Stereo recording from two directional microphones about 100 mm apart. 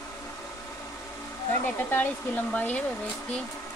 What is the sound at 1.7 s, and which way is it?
Speech, 20° left (ahead or behind).